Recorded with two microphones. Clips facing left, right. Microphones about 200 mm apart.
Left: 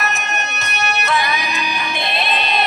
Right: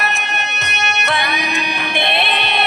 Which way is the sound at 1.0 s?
65° right (ahead or behind).